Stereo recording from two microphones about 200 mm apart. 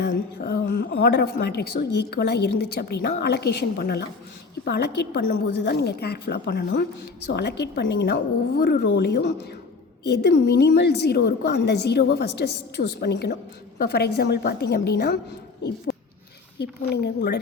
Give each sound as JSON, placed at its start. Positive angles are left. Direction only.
{"t": 0.0, "sound": "a woman's voice", "side_deg": 55}
{"t": 16.6, "sound": "a woman's voice", "side_deg": 55}